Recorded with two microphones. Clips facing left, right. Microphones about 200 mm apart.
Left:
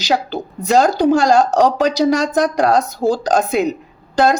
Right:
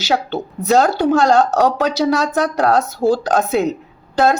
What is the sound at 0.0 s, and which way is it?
Speech, 15° left (ahead or behind).